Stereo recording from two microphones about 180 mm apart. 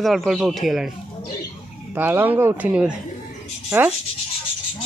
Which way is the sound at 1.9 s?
10° right (ahead or behind).